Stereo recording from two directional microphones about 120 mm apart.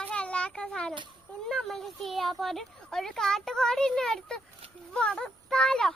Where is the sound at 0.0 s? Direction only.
10° left (ahead or behind).